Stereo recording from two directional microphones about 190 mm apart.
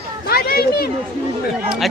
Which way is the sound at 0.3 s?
50° left (ahead or behind).